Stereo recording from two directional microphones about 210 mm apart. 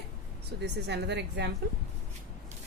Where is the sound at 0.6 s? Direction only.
55° right (ahead or behind).